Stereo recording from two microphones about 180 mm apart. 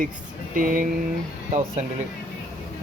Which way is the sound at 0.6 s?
50° right (ahead or behind).